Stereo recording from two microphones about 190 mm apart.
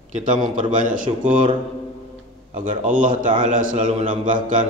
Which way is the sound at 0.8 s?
45° right (ahead or behind).